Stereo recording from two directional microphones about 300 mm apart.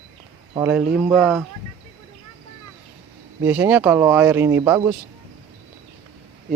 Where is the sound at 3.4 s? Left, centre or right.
Centre.